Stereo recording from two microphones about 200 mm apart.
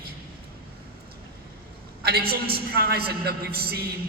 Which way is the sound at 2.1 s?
50° right (ahead or behind).